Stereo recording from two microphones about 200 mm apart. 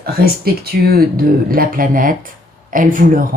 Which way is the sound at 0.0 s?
50° right (ahead or behind).